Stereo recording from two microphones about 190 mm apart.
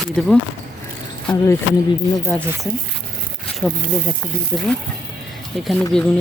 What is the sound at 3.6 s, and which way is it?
Speech, 5° left (ahead or behind).